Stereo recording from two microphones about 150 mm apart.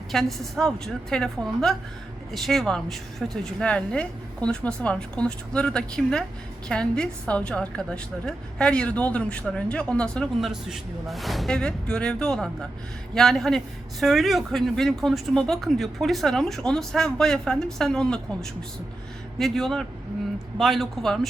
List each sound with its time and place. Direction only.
0.1 s a woman's voice: centre (ahead or behind)